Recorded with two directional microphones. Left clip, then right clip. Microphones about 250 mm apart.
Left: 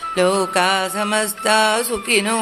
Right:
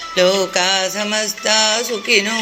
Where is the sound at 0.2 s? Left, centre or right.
Centre.